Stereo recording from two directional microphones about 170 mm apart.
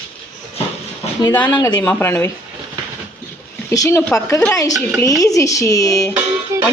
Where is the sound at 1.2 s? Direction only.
10° left (ahead or behind).